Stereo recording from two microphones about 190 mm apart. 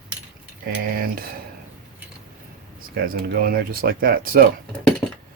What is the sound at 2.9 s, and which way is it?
Speech, 50° right (ahead or behind).